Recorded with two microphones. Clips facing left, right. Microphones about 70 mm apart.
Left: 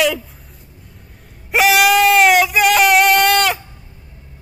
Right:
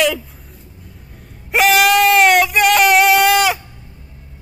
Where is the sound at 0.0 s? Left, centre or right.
Centre.